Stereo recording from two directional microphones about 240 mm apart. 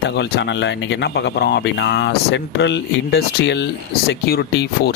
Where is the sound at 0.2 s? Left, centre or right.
Left.